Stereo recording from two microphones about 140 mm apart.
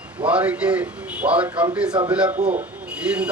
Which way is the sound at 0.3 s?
10° right (ahead or behind).